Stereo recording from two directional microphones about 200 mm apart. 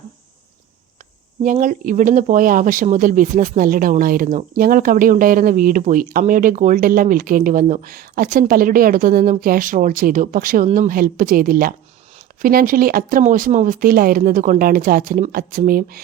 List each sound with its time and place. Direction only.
1.5 s speech: 40° right (ahead or behind)